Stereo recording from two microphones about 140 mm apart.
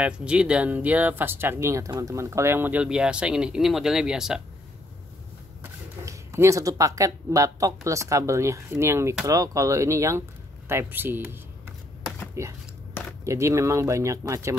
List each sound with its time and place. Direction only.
0.0 s speech: 5° right (ahead or behind)
5.6 s speech: 20° right (ahead or behind)